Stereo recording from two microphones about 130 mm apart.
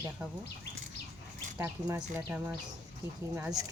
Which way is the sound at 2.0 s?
10° right (ahead or behind).